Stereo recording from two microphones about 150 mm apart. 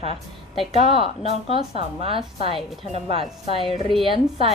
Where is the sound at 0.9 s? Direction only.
40° right (ahead or behind).